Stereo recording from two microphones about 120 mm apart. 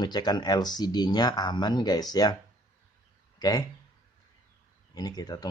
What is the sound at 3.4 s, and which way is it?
Speech, 35° left (ahead or behind).